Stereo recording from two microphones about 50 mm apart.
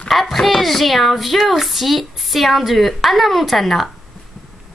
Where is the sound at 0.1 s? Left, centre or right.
Centre.